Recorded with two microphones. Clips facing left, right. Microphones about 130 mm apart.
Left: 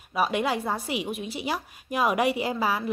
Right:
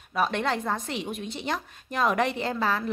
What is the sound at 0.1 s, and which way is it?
A woman's voice, 10° left (ahead or behind).